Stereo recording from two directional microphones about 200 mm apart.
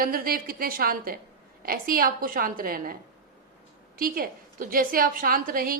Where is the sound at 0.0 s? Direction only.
45° right (ahead or behind).